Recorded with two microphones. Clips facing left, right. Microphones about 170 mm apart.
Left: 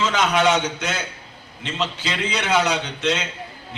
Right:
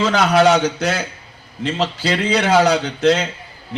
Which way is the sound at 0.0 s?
35° right (ahead or behind).